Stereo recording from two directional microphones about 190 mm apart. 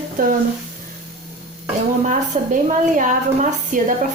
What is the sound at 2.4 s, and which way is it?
A woman's voice, 40° right (ahead or behind).